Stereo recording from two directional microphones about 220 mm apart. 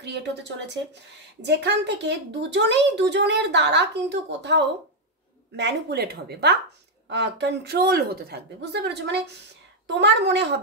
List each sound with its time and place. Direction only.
0.0 s a woman's voice: 50° right (ahead or behind)